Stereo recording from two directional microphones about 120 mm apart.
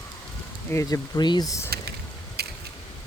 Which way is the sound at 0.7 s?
30° left (ahead or behind).